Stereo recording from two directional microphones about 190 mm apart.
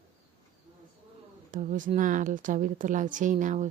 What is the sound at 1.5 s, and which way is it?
A woman's voice, 45° right (ahead or behind).